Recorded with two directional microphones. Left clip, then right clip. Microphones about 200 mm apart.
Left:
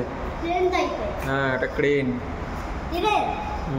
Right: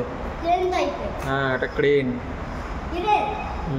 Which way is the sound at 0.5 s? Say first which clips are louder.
Right 3 dB; 50° right (ahead or behind).